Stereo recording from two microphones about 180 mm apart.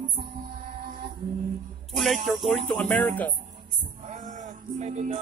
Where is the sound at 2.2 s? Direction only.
Centre (ahead or behind).